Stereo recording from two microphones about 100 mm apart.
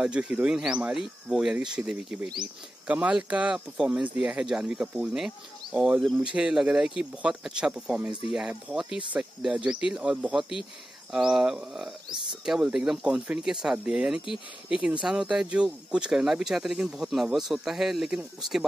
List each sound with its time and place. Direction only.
0.0 s speech: 10° right (ahead or behind)